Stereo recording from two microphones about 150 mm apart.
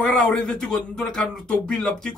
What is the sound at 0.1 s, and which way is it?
A man's voice, centre (ahead or behind).